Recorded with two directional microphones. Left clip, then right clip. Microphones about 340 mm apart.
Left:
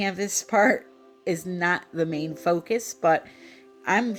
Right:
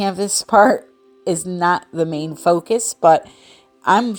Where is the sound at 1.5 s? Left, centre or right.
Centre.